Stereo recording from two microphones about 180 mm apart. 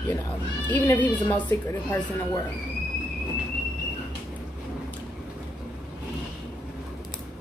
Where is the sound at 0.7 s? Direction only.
10° left (ahead or behind).